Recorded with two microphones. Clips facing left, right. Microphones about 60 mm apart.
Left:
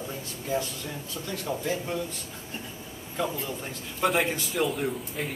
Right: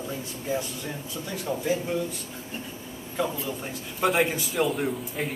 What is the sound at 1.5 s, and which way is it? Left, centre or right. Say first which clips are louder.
Speech: right 2 dB; centre.